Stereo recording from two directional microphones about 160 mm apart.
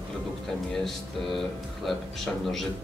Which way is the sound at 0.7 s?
Centre (ahead or behind).